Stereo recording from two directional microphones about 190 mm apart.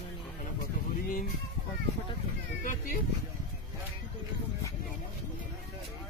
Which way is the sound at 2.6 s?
45° left (ahead or behind).